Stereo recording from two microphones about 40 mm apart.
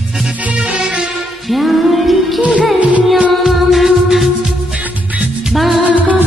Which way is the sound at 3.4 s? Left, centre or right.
Centre.